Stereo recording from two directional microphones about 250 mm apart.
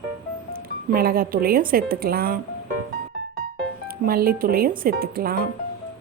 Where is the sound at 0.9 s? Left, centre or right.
Right.